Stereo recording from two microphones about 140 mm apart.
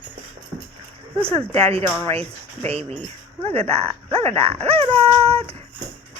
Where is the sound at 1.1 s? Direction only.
45° right (ahead or behind).